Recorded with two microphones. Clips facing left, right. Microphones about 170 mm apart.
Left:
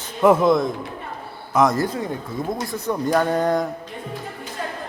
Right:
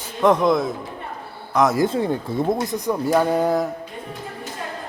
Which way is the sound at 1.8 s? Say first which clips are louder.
Right 5 dB; 30° right (ahead or behind).